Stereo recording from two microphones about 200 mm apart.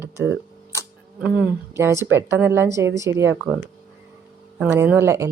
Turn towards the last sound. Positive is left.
turn(degrees=-15)  # may be behind; listen again after turning